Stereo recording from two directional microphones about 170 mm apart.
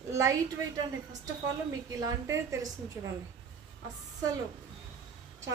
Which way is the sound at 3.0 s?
15° right (ahead or behind).